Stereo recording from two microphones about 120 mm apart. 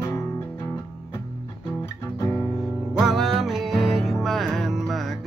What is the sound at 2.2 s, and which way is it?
Music, 25° left (ahead or behind).